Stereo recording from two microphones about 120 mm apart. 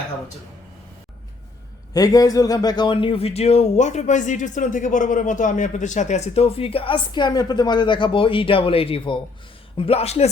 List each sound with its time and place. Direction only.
1.9 s a man's voice: 30° left (ahead or behind); by 10.2 s 60° left (ahead or behind)